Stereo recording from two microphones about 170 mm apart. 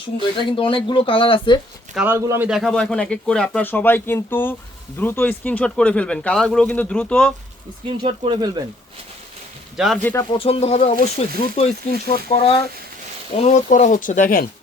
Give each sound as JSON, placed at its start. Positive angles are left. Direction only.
{"t": 0.5, "sound": "speech", "side_deg": 30}
{"t": 2.0, "sound": "speech", "side_deg": -15}
{"t": 2.5, "sound": "speech", "side_deg": 0}
{"t": 8.0, "sound": "speech", "side_deg": -30}
{"t": 9.7, "sound": "speech", "side_deg": 0}
{"t": 10.0, "sound": "speech", "side_deg": 15}
{"t": 10.3, "sound": "speech", "side_deg": 35}